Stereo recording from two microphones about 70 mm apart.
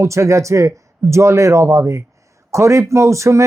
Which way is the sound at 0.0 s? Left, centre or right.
Right.